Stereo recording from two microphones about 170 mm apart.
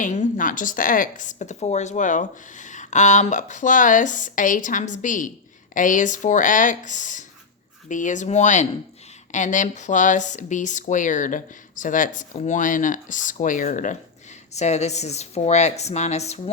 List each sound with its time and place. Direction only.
0.0 s a woman's voice: 45° left (ahead or behind)